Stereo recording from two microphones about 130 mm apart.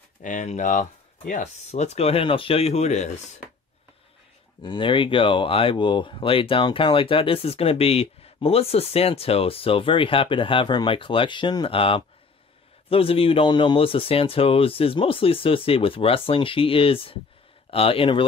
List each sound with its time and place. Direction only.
0.2 s speech: 75° left (ahead or behind); by 3.1 s 60° left (ahead or behind)
4.6 s speech: 40° left (ahead or behind)